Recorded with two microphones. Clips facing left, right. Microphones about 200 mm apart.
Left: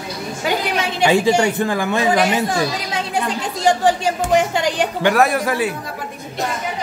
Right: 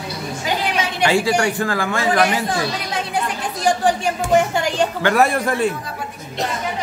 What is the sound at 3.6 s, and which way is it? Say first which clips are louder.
Speech: left 2 dB; 20° left (ahead or behind).